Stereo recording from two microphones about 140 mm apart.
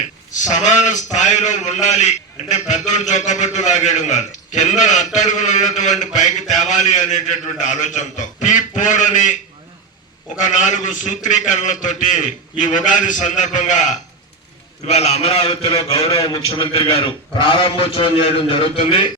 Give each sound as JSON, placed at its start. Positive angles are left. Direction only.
{"t": 0.3, "sound": "a man's voice", "side_deg": 60}
{"t": 10.4, "sound": "a man's voice", "side_deg": 60}
{"t": 15.9, "sound": "a man's voice", "side_deg": 25}